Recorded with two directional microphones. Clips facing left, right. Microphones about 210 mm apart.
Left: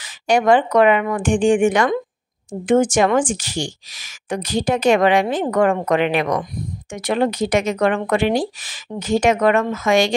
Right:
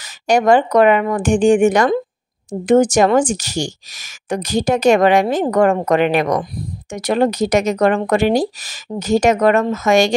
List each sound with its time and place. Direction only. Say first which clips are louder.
0.0 s speech: right 2 dB; 40° right (ahead or behind)